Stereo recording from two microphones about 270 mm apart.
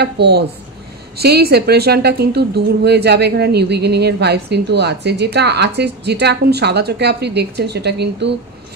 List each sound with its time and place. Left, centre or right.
0.0 s a woman's voice: right